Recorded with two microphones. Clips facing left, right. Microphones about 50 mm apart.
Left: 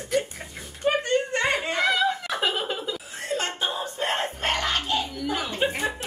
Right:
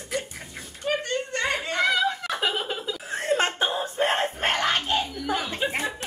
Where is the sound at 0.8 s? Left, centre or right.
Left.